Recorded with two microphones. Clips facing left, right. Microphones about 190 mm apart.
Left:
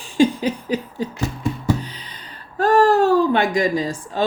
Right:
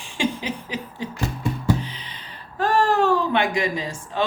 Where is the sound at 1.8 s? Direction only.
40° left (ahead or behind).